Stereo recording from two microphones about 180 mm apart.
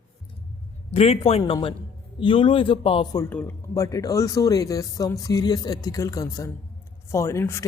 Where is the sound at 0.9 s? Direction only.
35° left (ahead or behind).